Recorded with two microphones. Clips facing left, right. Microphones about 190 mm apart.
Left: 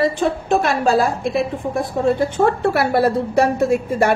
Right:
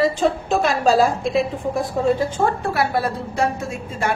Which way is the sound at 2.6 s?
65° left (ahead or behind).